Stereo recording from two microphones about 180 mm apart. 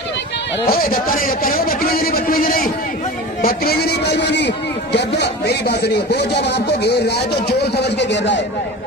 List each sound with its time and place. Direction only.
0.7 s a man's voice: 50° left (ahead or behind); by 8.4 s 75° left (ahead or behind)